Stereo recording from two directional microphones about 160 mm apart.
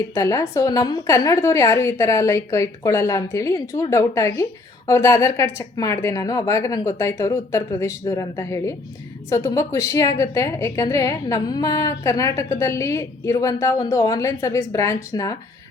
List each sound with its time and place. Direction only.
0.1 s a woman's voice: 20° left (ahead or behind)